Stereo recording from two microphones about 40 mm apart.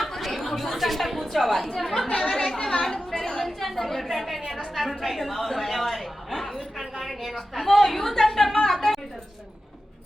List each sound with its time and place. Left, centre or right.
0.0 s chatter: centre
2.0 s speech: left
2.3 s chatter: centre
2.9 s a sound: centre
4.7 s a woman's voice: centre
8.7 s a sound: centre